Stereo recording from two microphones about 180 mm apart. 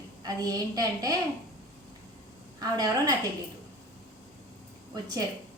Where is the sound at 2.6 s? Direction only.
20° right (ahead or behind).